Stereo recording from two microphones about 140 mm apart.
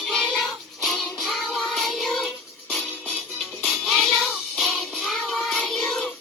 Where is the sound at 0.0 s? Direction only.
5° left (ahead or behind).